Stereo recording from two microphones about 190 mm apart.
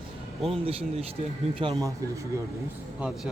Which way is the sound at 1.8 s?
15° right (ahead or behind).